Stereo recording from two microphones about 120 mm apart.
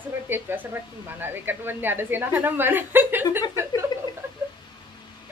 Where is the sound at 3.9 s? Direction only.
35° left (ahead or behind).